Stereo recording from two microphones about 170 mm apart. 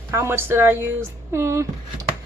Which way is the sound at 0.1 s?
15° right (ahead or behind).